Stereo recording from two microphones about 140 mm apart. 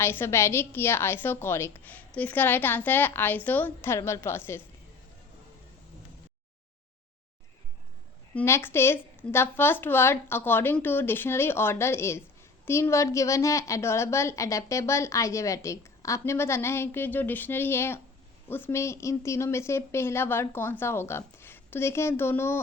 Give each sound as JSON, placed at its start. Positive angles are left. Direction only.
{"t": 0.0, "sound": "a woman's voice", "side_deg": 15}
{"t": 8.4, "sound": "a woman's voice", "side_deg": 15}